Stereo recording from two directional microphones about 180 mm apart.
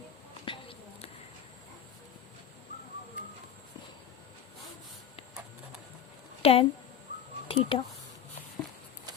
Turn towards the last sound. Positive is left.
turn(degrees=30)  # may be behind; listen again after turning